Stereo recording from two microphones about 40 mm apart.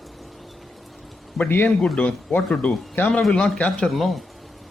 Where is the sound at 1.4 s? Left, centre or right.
Centre.